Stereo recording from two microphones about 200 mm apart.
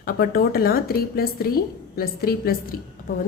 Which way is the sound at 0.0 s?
45° left (ahead or behind).